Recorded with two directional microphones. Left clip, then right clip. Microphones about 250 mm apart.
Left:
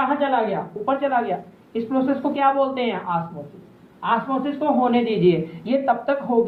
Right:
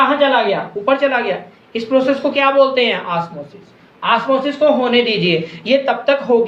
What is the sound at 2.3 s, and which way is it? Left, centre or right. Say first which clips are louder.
Speech: right 7 dB; right.